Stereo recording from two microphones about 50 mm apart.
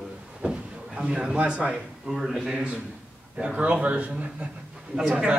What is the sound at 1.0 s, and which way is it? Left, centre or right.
Speech, centre.